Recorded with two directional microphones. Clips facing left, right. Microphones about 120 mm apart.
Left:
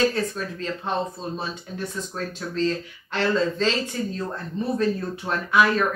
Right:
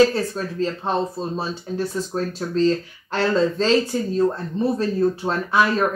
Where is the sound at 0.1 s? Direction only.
30° right (ahead or behind).